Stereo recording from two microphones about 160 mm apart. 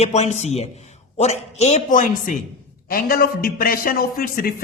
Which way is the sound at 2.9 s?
65° left (ahead or behind).